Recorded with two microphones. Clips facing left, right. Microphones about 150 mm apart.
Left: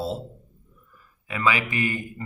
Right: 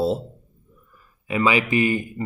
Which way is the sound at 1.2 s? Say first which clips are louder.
Right 5 dB; 20° right (ahead or behind).